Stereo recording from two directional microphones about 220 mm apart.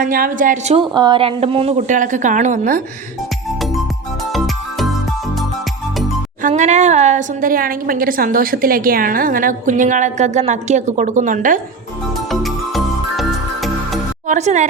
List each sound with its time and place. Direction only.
0.0 s a woman's voice: 40° right (ahead or behind)
0.8 s a woman's voice: 20° right (ahead or behind); by 2.8 s 35° right (ahead or behind)
4.3 s music: centre (ahead or behind)
6.4 s a woman's voice: 30° right (ahead or behind)
12.3 s music: centre (ahead or behind)
14.3 s speech: 30° right (ahead or behind)